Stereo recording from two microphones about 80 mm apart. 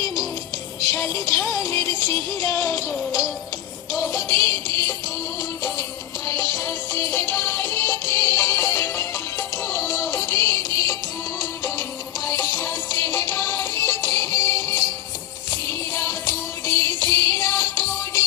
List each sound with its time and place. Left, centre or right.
0.8 s music: left
2.5 s music: left
3.9 s music: left
6.6 s music: left
11.3 s music: left
12.3 s music: left
15.4 s music: left